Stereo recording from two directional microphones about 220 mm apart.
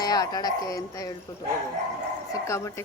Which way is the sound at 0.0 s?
15° left (ahead or behind).